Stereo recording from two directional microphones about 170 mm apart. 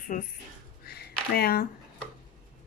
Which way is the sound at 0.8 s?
70° left (ahead or behind).